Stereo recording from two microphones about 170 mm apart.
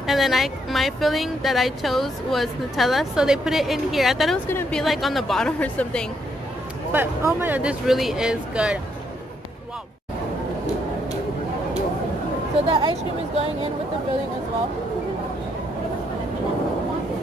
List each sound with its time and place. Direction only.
0.0 s speech: centre (ahead or behind)
4.5 s speech: 10° left (ahead or behind)
6.9 s speech: 15° right (ahead or behind)
12.6 s speech: 30° right (ahead or behind)